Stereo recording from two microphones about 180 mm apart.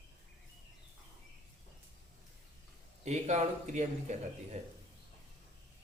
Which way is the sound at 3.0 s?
40° right (ahead or behind).